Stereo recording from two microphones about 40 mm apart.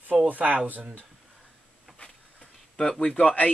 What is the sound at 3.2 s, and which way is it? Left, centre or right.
Speech, left.